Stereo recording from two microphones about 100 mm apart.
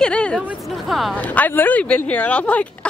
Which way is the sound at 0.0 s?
10° left (ahead or behind).